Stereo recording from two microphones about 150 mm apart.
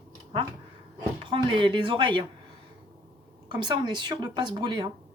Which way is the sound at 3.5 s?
30° right (ahead or behind).